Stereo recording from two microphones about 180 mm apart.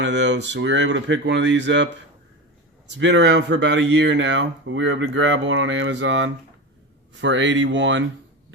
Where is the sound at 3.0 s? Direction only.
90° right.